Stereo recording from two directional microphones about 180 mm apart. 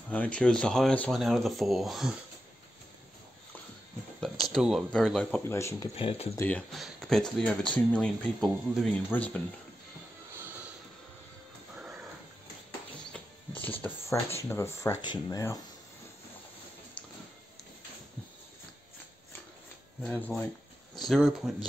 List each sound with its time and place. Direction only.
0.1 s speech: 5° left (ahead or behind)
4.2 s speech: centre (ahead or behind)
5.5 s speech: 15° left (ahead or behind)
5.9 s speech: 35° left (ahead or behind)
6.3 s speech: 10° left (ahead or behind)
11.7 s music: 5° right (ahead or behind)
13.1 s a sound: 10° left (ahead or behind)
14.5 s speech: 15° left (ahead or behind)
17.0 s a sound: 5° left (ahead or behind)
20.0 s speech: 10° left (ahead or behind)